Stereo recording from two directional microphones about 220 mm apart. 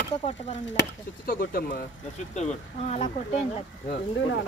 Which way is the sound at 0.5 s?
55° left (ahead or behind).